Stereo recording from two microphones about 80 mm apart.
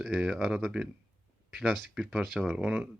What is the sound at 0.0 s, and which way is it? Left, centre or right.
Speech, centre.